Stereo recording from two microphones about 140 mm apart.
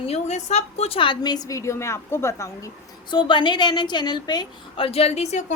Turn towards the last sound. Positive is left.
turn(degrees=50)  # may be behind; listen again after turning